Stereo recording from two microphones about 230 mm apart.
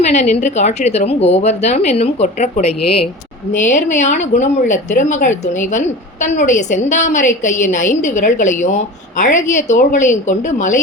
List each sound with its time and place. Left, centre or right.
0.0 s a woman's voice: left